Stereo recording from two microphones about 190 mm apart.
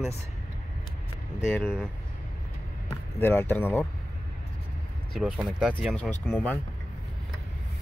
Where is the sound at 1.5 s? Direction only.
5° left (ahead or behind).